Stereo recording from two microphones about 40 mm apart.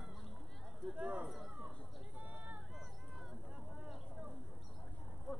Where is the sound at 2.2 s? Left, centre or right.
Right.